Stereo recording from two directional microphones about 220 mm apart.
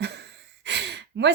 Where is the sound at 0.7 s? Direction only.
50° right (ahead or behind).